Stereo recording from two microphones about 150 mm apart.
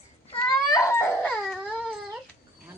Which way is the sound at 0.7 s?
20° left (ahead or behind).